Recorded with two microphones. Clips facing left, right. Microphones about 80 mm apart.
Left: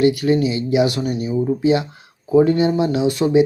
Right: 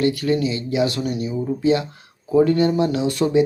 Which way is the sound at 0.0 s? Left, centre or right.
Centre.